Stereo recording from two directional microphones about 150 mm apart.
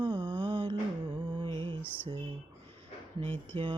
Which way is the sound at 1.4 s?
40° right (ahead or behind).